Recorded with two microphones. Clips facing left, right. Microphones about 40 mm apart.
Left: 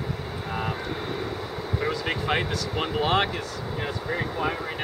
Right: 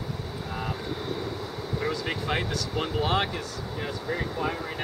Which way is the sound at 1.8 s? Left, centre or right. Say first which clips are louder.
Left 2 dB; centre.